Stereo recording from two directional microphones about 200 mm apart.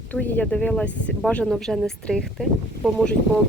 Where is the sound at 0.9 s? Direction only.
65° left (ahead or behind).